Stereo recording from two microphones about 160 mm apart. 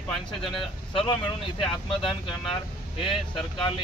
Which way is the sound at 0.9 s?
30° left (ahead or behind).